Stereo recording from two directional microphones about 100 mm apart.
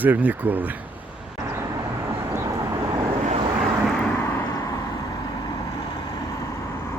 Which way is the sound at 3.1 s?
75° right (ahead or behind).